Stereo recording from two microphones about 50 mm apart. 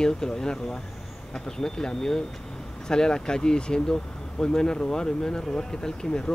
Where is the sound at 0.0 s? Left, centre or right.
Centre.